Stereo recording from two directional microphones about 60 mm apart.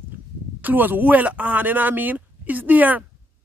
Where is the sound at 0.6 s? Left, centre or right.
Right.